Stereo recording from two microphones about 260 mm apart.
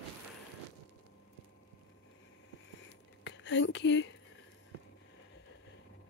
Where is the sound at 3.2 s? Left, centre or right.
Left.